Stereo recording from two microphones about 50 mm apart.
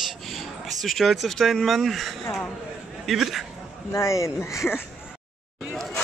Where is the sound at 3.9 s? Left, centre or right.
Left.